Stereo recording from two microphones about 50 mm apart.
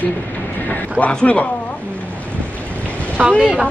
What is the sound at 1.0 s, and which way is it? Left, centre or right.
Speech, left.